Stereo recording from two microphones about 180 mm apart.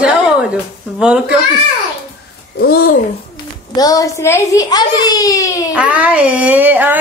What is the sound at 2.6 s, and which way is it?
Speech, 55° left (ahead or behind).